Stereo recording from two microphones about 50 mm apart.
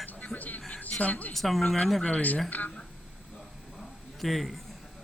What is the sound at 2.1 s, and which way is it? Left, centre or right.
Speech, left.